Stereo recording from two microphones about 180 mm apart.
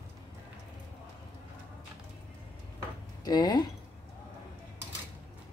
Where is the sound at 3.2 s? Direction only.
20° left (ahead or behind).